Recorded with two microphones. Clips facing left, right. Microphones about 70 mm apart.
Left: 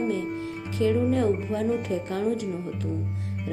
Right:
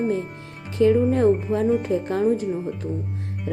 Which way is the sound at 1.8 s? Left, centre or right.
Right.